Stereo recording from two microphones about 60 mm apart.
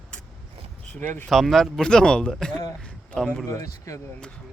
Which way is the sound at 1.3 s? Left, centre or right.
Centre.